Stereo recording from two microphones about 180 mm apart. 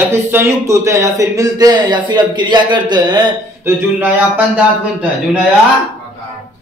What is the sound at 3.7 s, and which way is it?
Speech, 10° right (ahead or behind).